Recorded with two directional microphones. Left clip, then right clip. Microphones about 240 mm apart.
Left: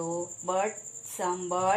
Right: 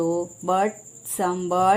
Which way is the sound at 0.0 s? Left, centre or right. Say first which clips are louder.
Right 8 dB; right.